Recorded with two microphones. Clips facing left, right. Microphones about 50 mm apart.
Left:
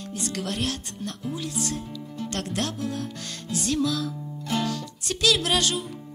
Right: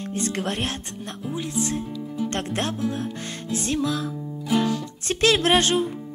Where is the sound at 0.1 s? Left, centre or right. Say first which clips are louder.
Right 4 dB; right.